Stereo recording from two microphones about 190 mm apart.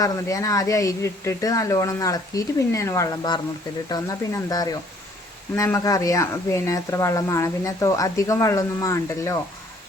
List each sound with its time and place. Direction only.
0.0 s speech: 15° left (ahead or behind)